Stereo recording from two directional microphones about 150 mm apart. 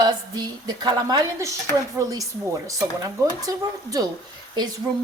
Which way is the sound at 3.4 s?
25° right (ahead or behind).